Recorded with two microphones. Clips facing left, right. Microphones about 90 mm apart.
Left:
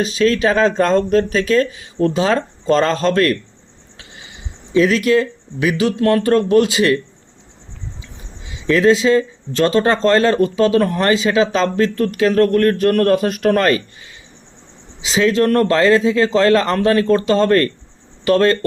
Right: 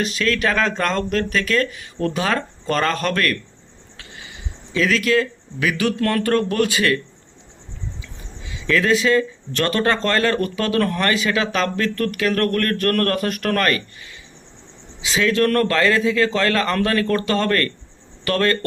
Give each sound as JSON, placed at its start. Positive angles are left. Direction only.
{"t": 0.0, "sound": "speech", "side_deg": 25}
{"t": 8.4, "sound": "speech", "side_deg": 25}
{"t": 15.0, "sound": "speech", "side_deg": 25}